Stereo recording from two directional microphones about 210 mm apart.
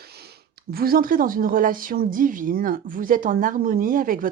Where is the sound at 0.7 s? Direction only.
45° right (ahead or behind).